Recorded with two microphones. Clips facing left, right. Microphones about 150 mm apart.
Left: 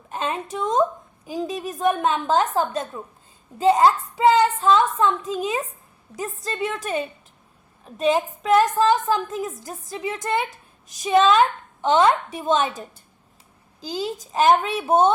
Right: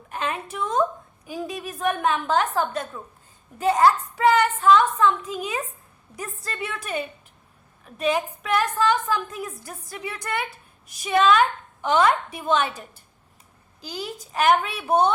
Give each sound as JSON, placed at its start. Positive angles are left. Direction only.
{"t": 0.1, "sound": "a woman's voice", "side_deg": 30}
{"t": 1.3, "sound": "a woman's voice", "side_deg": 20}
{"t": 2.1, "sound": "a woman's voice", "side_deg": 35}
{"t": 3.6, "sound": "a woman's voice", "side_deg": 15}
{"t": 6.7, "sound": "a woman's voice", "side_deg": 40}
{"t": 7.9, "sound": "a woman's voice", "side_deg": 25}
{"t": 8.6, "sound": "a woman's voice", "side_deg": 35}
{"t": 9.3, "sound": "a woman's voice", "side_deg": 20}
{"t": 13.8, "sound": "a woman's voice", "side_deg": 25}